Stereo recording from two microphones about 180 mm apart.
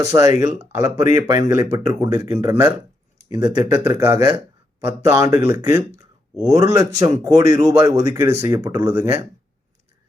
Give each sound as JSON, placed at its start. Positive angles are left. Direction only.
{"t": 0.1, "sound": "speech", "side_deg": -20}